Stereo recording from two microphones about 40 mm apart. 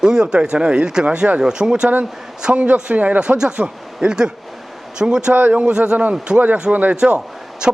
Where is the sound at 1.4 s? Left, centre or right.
Right.